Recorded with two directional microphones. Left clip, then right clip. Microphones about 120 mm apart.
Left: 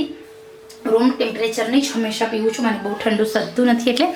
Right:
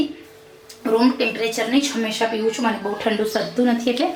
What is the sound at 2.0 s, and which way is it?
Speech, 5° left (ahead or behind).